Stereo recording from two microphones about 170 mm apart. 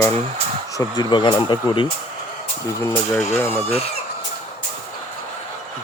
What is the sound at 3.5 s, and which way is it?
Chicken, 40° left (ahead or behind).